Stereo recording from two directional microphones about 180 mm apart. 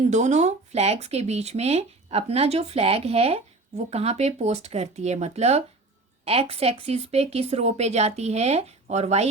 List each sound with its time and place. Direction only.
0.1 s speech: 40° right (ahead or behind)